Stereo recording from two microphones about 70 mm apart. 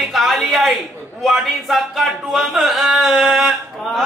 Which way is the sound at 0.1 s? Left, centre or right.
Centre.